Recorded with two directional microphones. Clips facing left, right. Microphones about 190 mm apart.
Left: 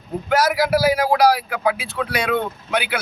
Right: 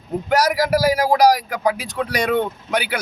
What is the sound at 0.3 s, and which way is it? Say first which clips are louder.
Speech: even; 40° right (ahead or behind).